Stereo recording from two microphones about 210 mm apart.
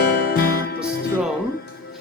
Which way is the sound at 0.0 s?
45° left (ahead or behind).